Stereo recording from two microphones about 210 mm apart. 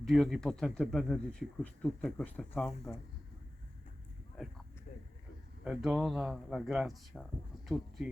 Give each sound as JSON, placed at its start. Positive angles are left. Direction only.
{"t": 0.0, "sound": "speech", "side_deg": 0}
{"t": 4.9, "sound": "a sound", "side_deg": 35}
{"t": 5.6, "sound": "speech", "side_deg": -5}